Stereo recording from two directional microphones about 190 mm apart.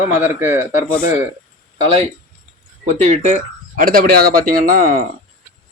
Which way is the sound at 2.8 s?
35° right (ahead or behind).